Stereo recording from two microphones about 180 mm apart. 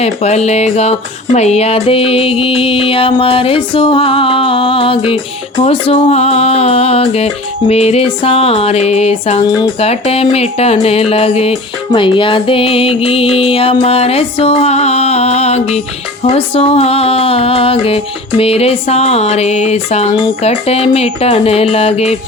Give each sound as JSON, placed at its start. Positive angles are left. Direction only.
{"t": 0.0, "sound": "speech", "side_deg": 35}